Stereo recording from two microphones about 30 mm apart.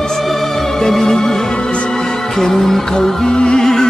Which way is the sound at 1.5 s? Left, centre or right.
Left.